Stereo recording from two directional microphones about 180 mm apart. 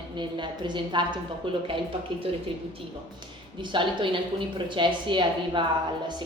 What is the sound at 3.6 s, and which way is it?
A woman's voice, 25° right (ahead or behind).